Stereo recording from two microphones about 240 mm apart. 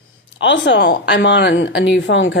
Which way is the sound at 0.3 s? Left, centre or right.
Left.